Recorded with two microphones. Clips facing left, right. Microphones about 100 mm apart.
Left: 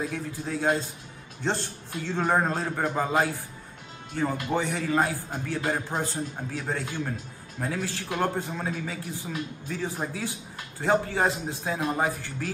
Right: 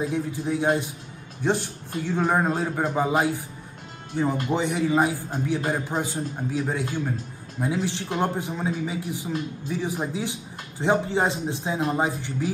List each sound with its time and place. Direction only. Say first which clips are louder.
0.0 s a man's voice: right 5 dB; 20° right (ahead or behind)